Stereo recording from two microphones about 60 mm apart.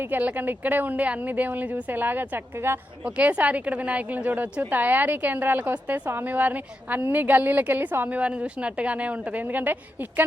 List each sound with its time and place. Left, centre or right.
0.0 s a woman's voice: right
3.0 s a woman's voice: right
8.2 s a woman's voice: centre